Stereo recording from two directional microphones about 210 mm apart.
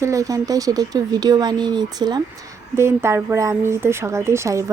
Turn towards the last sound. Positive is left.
turn(degrees=-15)  # may be behind; listen again after turning